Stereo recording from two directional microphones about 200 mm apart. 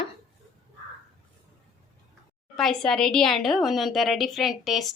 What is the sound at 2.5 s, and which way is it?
A woman's voice, 5° left (ahead or behind).